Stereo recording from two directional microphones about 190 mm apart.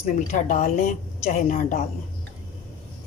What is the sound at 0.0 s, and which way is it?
A woman's voice, 40° left (ahead or behind).